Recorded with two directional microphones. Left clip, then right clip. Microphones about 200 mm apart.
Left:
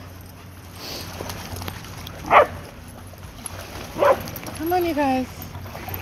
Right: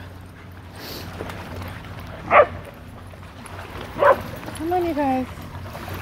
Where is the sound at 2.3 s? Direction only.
55° left (ahead or behind).